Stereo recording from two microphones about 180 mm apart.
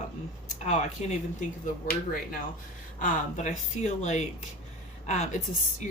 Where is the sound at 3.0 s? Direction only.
45° left (ahead or behind).